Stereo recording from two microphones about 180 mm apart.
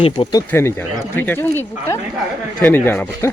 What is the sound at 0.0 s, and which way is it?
Speech, 25° left (ahead or behind).